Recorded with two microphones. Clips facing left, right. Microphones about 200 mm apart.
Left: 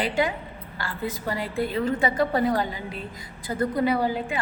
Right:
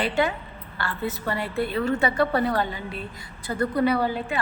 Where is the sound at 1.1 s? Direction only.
90° left.